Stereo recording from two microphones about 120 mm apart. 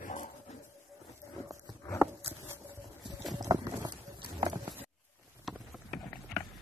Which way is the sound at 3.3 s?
30° right (ahead or behind).